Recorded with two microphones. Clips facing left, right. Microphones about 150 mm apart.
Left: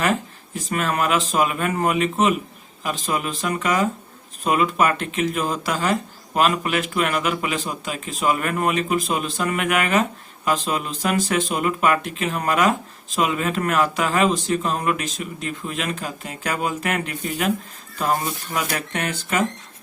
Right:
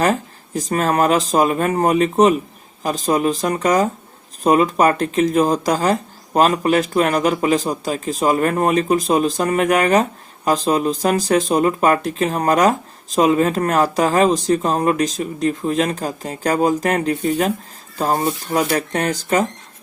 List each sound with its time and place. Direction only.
0.0 s speech: 40° right (ahead or behind)